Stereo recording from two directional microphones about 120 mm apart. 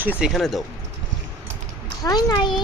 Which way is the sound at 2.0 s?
35° left (ahead or behind).